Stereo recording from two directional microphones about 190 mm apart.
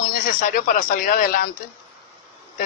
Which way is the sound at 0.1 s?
45° left (ahead or behind).